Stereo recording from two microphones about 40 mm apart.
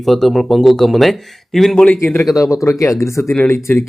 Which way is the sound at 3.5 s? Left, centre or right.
Left.